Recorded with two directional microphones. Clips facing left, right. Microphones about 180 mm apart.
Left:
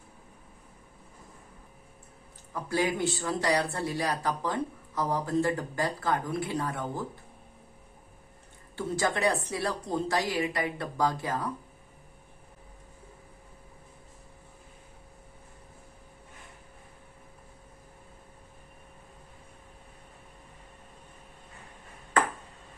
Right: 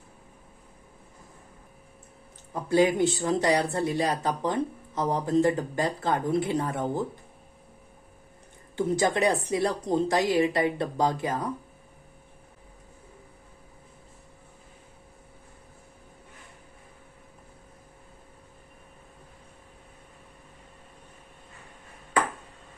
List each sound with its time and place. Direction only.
2.5 s speech: 20° right (ahead or behind)
8.7 s speech: 20° right (ahead or behind)